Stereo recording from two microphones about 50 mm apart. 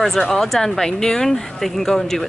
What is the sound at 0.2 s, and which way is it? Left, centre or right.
Speech, centre.